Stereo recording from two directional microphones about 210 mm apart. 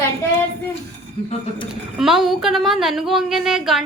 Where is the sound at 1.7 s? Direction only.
Centre (ahead or behind).